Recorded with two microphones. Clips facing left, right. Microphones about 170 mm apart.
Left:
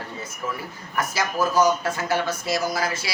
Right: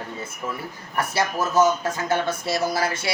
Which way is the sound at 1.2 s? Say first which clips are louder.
Right 1 dB; 25° right (ahead or behind).